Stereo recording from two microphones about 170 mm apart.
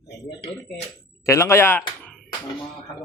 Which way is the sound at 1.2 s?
15° left (ahead or behind).